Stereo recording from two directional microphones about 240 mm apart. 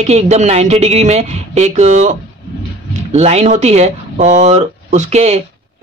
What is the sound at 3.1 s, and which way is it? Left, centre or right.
Speech, right.